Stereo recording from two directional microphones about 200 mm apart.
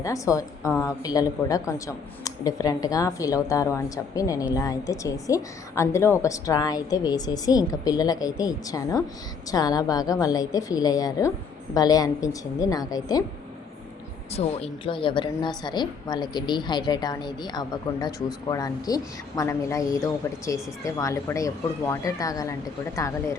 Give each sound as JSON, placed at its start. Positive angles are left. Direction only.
{"t": 0.0, "sound": "a woman's voice", "side_deg": 15}
{"t": 14.3, "sound": "a woman's voice", "side_deg": 30}